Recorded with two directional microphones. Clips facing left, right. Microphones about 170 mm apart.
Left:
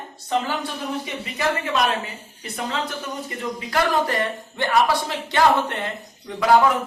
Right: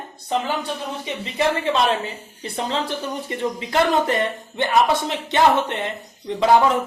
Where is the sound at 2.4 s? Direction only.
30° right (ahead or behind).